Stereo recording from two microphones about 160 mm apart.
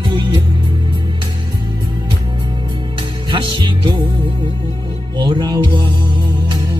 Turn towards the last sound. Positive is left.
turn(degrees=-25)  # may be behind; listen again after turning